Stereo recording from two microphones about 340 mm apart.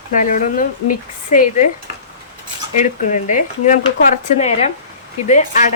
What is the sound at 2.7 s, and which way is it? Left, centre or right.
Cutlery, left.